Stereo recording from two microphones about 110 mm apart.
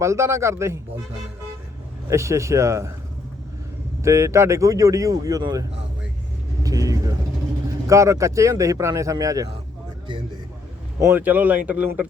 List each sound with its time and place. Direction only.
0.0 s speech: 25° right (ahead or behind)
2.0 s speech: 25° right (ahead or behind)
4.0 s speech: 25° right (ahead or behind)
6.6 s vehicle: 30° right (ahead or behind)
7.9 s speech: 30° right (ahead or behind)
11.0 s speech: 15° right (ahead or behind)